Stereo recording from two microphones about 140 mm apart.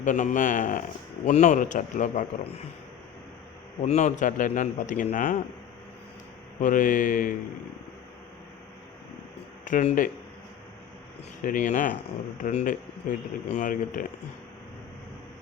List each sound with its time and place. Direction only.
0.0 s speech: 65° left (ahead or behind)
3.8 s speech: 55° left (ahead or behind); by 5.4 s 70° left (ahead or behind)
6.6 s speech: 75° left (ahead or behind)
9.6 s speech: 70° left (ahead or behind)
11.4 s speech: 70° left (ahead or behind)